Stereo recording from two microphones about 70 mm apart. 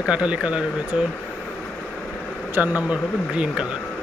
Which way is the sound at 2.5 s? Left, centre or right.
Right.